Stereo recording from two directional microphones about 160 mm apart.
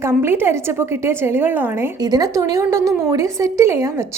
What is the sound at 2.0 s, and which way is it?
A woman's voice, 20° right (ahead or behind).